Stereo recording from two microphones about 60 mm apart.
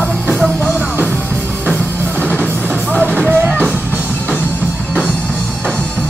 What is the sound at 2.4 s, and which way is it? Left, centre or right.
Music, centre.